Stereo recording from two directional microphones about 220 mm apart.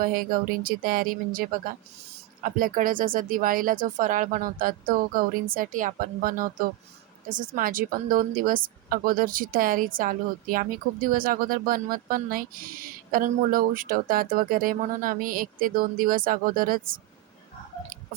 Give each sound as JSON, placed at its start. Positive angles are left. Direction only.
{"t": 0.0, "sound": "a woman's voice", "side_deg": -40}